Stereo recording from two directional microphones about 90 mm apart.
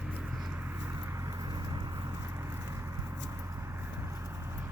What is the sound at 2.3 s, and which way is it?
Vehicle, 30° right (ahead or behind).